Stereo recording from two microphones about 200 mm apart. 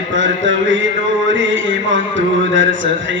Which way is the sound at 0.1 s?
70° right (ahead or behind).